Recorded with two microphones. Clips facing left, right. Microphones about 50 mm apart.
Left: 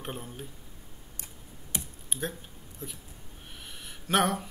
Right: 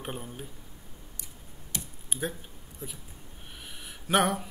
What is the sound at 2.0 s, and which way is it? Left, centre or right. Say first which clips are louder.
Typing: right 2 dB; centre.